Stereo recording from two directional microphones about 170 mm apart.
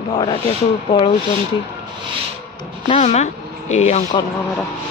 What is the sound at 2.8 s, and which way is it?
Speech, 45° left (ahead or behind).